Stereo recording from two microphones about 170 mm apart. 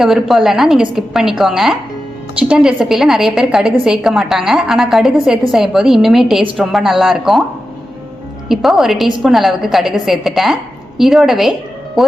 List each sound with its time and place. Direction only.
0.0 s a woman's voice: centre (ahead or behind)
8.4 s a woman's voice: centre (ahead or behind)